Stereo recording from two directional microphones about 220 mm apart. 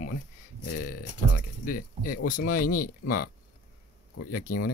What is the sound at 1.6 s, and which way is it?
Speech, 40° left (ahead or behind).